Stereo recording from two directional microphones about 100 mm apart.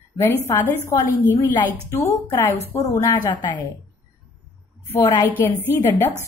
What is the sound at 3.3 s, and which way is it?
Speech, 50° left (ahead or behind).